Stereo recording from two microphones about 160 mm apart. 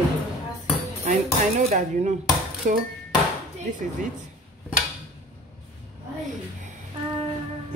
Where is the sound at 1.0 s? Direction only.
50° right (ahead or behind).